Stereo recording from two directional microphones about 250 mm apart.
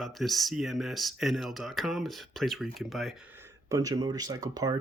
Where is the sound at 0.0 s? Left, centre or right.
Centre.